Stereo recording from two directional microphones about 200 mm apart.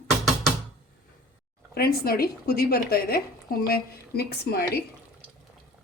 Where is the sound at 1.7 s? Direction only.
50° left (ahead or behind).